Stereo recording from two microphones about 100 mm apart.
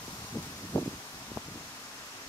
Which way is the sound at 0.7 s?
15° left (ahead or behind).